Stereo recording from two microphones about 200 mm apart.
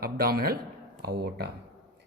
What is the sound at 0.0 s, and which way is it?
A man's voice, 50° right (ahead or behind).